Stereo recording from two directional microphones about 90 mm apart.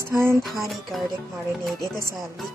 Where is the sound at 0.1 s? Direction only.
30° right (ahead or behind).